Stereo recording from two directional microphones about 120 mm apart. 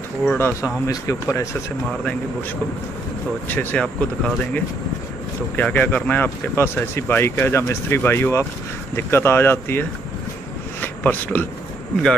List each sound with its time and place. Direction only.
0.2 s speech: 15° left (ahead or behind)
3.4 s speech: 10° left (ahead or behind)